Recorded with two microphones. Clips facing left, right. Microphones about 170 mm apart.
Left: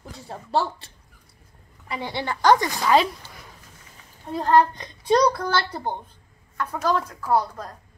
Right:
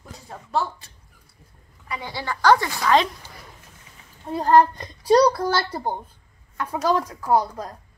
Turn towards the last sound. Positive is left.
turn(degrees=-15)  # may be behind; listen again after turning